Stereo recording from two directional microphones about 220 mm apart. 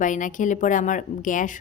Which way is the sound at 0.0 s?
35° left (ahead or behind).